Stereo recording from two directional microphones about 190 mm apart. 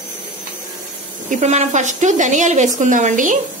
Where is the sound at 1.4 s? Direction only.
40° right (ahead or behind).